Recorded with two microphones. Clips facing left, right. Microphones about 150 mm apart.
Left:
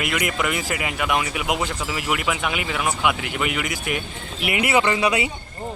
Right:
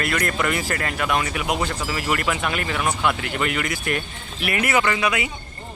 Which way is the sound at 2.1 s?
5° left (ahead or behind).